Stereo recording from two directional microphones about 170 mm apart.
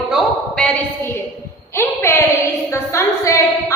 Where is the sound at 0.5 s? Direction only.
10° left (ahead or behind).